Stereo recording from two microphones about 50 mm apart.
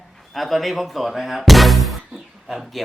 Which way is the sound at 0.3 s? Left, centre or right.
Centre.